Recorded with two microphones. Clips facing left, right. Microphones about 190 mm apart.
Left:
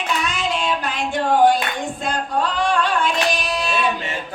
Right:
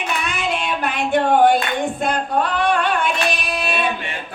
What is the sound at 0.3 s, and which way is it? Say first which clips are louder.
Child singing: even; 60° right (ahead or behind).